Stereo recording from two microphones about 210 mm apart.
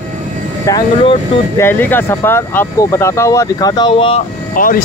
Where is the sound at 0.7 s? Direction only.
20° left (ahead or behind).